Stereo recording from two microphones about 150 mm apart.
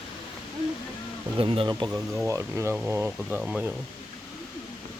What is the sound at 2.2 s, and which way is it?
Speech, 20° right (ahead or behind).